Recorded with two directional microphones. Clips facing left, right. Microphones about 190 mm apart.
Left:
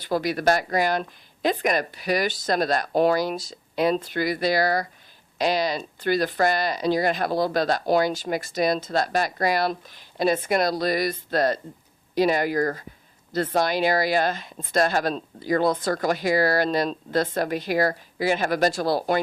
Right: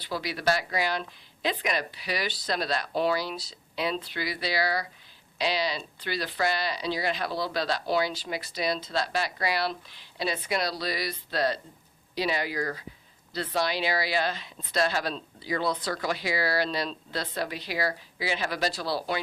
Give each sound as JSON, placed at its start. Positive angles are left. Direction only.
{"t": 0.0, "sound": "speech", "side_deg": 45}